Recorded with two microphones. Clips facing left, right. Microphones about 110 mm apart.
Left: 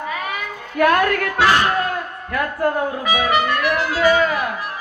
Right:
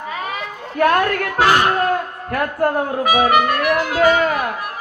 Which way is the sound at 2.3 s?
50° right (ahead or behind).